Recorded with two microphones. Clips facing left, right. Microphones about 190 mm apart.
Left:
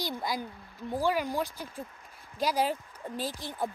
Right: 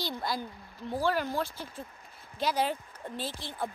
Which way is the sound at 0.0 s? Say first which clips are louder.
Left 1 dB; 15° left (ahead or behind).